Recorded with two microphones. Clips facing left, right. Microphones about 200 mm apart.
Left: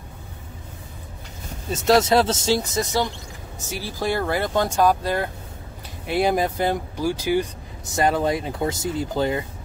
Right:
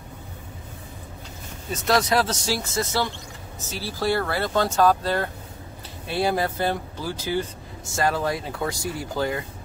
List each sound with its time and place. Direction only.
1.7 s speech: 25° left (ahead or behind)